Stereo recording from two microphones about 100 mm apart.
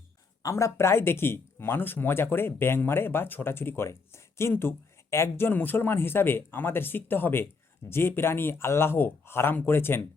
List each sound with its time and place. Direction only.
0.4 s speech: 30° left (ahead or behind)